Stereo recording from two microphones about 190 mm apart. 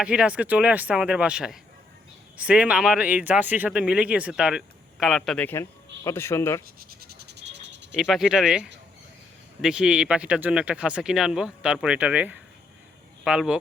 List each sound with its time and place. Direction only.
0.0 s speech: 5° right (ahead or behind); by 6.6 s 15° left (ahead or behind)
6.7 s a sound: 55° right (ahead or behind)
7.9 s speech: centre (ahead or behind)